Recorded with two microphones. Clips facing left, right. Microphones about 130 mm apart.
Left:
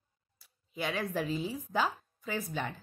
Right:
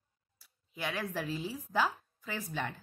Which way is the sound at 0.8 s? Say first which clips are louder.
Left 3 dB; 20° left (ahead or behind).